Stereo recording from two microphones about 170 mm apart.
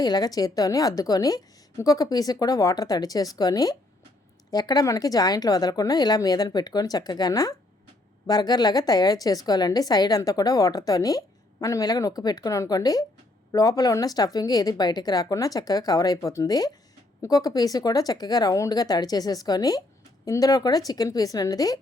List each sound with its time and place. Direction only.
0.0 s a woman's voice: 25° left (ahead or behind)